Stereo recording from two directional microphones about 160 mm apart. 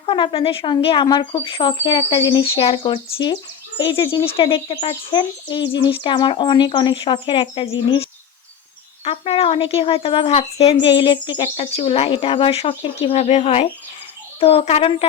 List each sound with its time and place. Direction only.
0.0 s a woman's voice: 35° left (ahead or behind)
9.0 s a woman's voice: 40° left (ahead or behind)